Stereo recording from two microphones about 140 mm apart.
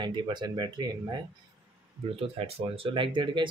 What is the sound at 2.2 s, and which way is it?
Speech, 45° right (ahead or behind).